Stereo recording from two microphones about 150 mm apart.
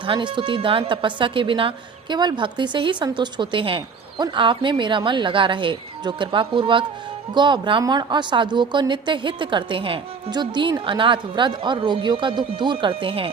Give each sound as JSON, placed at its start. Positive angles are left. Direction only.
{"t": 0.0, "sound": "a woman's voice", "side_deg": -30}